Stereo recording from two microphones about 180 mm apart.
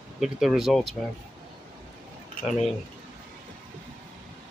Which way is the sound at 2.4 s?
Centre (ahead or behind).